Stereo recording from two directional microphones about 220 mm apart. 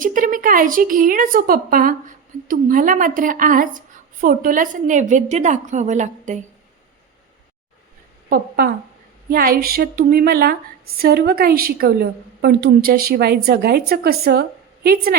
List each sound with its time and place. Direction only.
0.0 s a woman's voice: 35° right (ahead or behind)
8.3 s a woman's voice: 45° right (ahead or behind)